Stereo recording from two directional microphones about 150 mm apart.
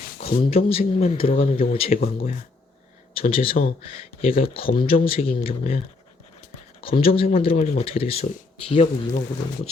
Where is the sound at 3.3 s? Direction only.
40° left (ahead or behind).